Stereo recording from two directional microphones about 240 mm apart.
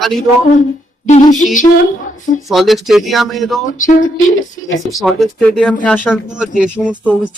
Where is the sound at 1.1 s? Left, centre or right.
Left.